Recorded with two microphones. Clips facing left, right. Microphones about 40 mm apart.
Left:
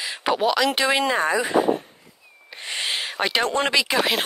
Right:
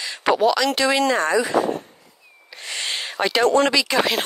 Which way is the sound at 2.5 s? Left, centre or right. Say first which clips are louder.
Left 1 dB; centre.